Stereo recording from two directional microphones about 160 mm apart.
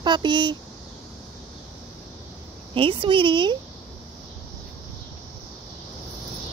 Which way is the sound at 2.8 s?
35° right (ahead or behind).